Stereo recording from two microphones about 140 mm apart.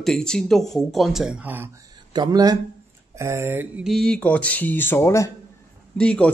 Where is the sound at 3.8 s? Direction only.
Centre (ahead or behind); by 5.3 s 20° left (ahead or behind).